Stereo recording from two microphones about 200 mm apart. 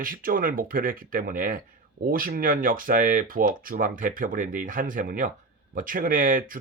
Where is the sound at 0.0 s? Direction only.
45° right (ahead or behind).